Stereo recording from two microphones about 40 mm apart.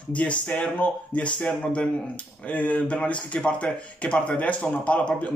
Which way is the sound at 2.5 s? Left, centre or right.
Left.